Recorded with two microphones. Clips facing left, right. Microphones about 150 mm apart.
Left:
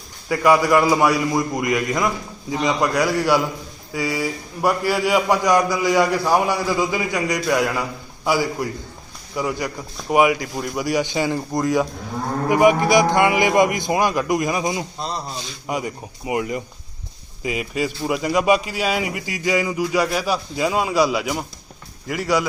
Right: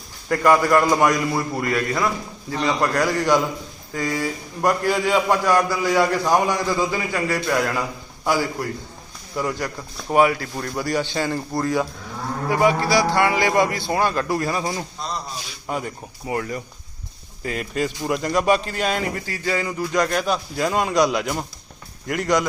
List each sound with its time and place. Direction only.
0.3 s a man's voice: 10° left (ahead or behind)